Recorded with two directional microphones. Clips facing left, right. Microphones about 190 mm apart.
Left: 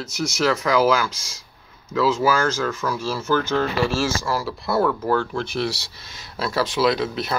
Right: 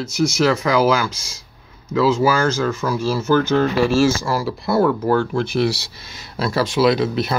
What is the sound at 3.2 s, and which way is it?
Speech, 15° right (ahead or behind).